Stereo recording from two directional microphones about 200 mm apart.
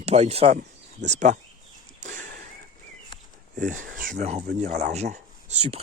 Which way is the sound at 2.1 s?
40° right (ahead or behind).